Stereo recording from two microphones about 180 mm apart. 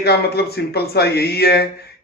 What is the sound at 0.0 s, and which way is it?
Speech, 65° left (ahead or behind).